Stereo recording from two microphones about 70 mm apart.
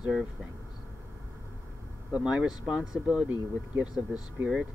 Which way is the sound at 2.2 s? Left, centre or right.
Centre.